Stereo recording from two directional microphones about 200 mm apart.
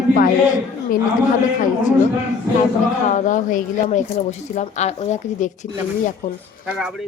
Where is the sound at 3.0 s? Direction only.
40° left (ahead or behind).